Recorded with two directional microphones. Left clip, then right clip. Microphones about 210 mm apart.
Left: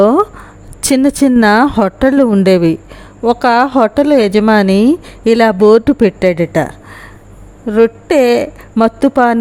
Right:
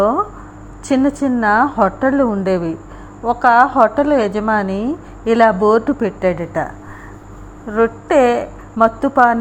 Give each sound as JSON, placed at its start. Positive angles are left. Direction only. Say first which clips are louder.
{"t": 0.0, "sound": "a woman's voice", "louder": "left 6 dB", "side_deg": 55}
{"t": 7.7, "sound": "a woman's voice", "louder": "left 4 dB", "side_deg": 55}